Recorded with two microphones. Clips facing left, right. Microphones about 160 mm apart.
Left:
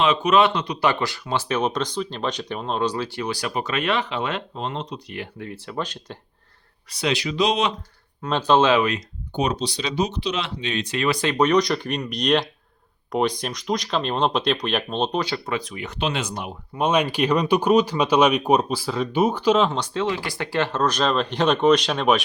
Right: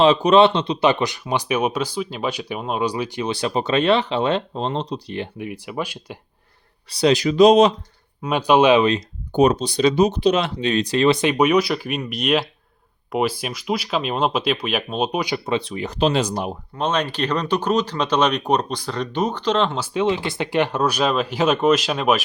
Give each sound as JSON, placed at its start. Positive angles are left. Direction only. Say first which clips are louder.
{"t": 0.0, "sound": "speech", "louder": "right 5 dB", "side_deg": -35}
{"t": 5.4, "sound": "speech", "louder": "right 2 dB", "side_deg": -15}
{"t": 6.9, "sound": "speech", "louder": "right 7 dB", "side_deg": -40}
{"t": 8.2, "sound": "speech", "louder": "right 3 dB", "side_deg": -10}
{"t": 9.3, "sound": "speech", "louder": "right 7 dB", "side_deg": -50}
{"t": 15.5, "sound": "speech", "louder": "right 5 dB", "side_deg": -30}
{"t": 16.7, "sound": "speech", "louder": "left 2 dB", "side_deg": 10}